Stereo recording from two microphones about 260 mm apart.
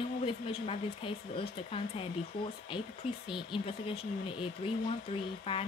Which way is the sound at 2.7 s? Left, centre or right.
Centre.